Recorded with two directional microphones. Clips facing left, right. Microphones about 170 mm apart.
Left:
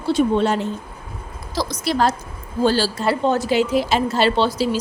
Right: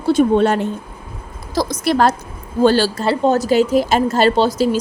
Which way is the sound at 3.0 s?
40° right (ahead or behind).